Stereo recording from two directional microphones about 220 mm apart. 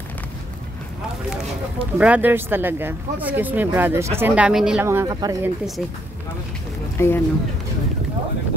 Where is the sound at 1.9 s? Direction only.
5° right (ahead or behind).